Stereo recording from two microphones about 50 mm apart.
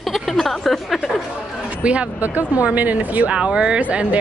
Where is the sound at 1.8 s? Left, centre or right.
Right.